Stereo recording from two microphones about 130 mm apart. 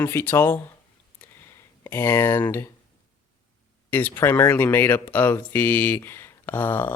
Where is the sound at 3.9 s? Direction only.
15° left (ahead or behind).